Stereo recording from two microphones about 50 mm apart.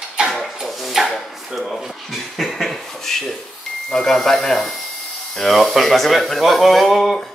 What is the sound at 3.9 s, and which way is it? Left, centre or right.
Speech, centre.